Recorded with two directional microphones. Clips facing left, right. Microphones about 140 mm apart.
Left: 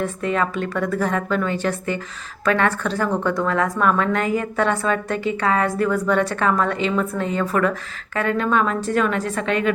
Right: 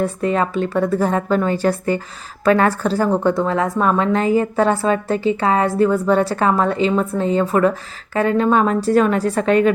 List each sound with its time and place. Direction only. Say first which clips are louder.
0.0 s a woman's voice: right 4 dB; 35° right (ahead or behind)